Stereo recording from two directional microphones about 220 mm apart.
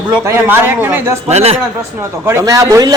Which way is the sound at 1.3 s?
30° right (ahead or behind).